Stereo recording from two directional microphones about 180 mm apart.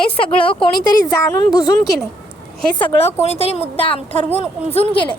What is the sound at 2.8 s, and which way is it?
A woman's voice, 30° left (ahead or behind).